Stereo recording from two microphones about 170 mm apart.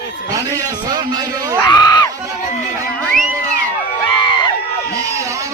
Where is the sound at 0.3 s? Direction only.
20° right (ahead or behind).